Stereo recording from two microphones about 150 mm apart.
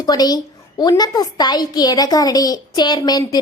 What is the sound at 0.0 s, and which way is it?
A woman's voice, 25° left (ahead or behind).